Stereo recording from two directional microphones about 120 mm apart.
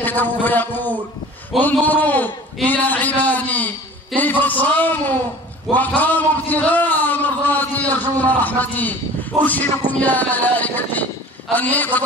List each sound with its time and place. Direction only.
0.0 s a man's voice: 15° left (ahead or behind)